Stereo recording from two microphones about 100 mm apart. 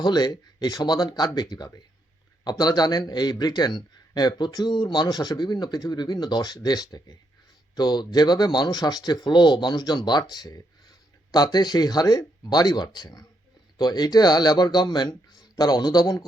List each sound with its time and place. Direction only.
0.0 s a man's voice: 45° left (ahead or behind)